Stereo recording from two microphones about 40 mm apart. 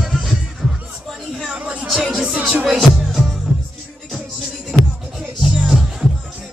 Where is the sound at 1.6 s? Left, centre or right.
Right.